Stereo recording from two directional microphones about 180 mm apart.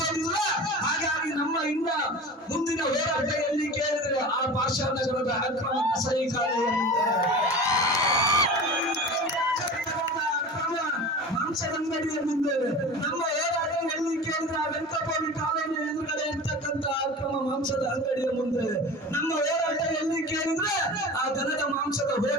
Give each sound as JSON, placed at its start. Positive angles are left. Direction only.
{"t": 7.7, "sound": "music", "side_deg": 20}